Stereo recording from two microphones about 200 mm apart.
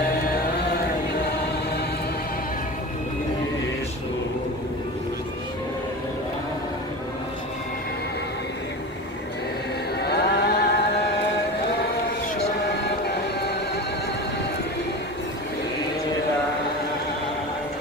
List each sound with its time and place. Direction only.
0.3 s chant: 50° left (ahead or behind)
9.9 s music: 55° left (ahead or behind)